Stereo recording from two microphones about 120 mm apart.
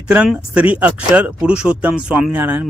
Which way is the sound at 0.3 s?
10° right (ahead or behind).